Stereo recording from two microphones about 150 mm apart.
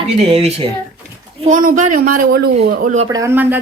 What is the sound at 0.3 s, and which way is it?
Speech, 45° right (ahead or behind).